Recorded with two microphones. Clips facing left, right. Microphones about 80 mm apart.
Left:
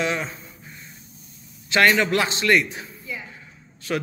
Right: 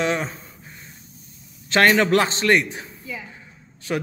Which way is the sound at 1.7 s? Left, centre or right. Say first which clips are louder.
Right 2 dB; right.